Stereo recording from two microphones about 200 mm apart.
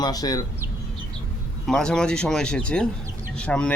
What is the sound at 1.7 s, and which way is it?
Speech, 5° left (ahead or behind).